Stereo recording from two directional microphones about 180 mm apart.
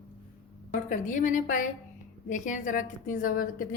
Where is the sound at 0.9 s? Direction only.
45° left (ahead or behind).